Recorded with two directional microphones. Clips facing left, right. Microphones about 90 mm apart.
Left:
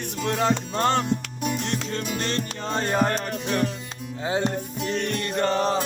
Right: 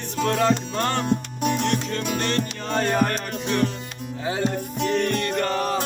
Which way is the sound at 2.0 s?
50° right (ahead or behind).